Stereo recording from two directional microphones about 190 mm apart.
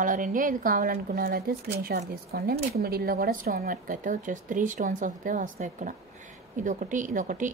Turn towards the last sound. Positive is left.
turn(degrees=-40)  # may be behind; listen again after turning